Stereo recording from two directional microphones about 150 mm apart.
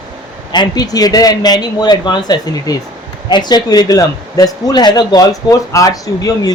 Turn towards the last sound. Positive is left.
turn(degrees=25)  # may be behind; listen again after turning